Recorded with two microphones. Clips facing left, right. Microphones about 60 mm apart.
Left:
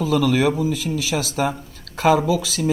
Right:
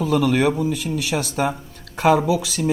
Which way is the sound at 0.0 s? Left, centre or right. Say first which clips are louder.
Even; centre.